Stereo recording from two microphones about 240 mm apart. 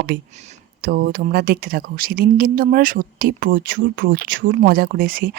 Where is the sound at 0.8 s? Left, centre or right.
Right.